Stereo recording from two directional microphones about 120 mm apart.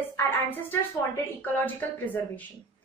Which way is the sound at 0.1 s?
15° left (ahead or behind).